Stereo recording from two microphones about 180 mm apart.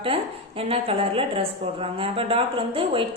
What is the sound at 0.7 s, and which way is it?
A woman's voice, 30° right (ahead or behind).